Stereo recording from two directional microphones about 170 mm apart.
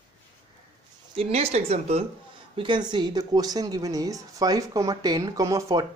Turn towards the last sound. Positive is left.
turn(degrees=-20)  # may be behind; listen again after turning